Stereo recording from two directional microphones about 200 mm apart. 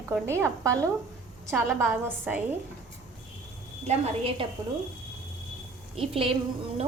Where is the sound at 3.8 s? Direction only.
30° right (ahead or behind).